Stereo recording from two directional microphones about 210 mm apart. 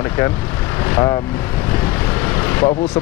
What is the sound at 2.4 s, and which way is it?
Vehicle, 10° left (ahead or behind).